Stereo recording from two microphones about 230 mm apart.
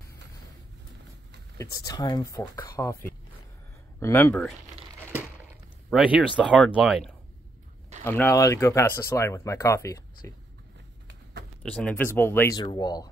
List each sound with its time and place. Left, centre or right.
1.6 s speech: centre
5.9 s speech: centre
8.0 s speech: centre
11.6 s speech: centre